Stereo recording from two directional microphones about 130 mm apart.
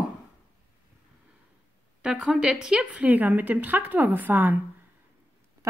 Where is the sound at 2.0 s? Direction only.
5° right (ahead or behind).